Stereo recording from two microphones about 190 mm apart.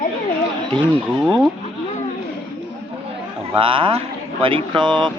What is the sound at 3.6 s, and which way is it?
Speech, 25° right (ahead or behind).